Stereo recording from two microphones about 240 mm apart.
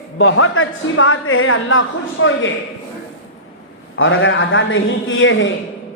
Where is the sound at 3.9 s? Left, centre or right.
Left.